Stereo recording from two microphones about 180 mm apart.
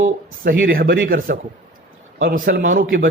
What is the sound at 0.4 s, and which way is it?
Speech, 55° right (ahead or behind).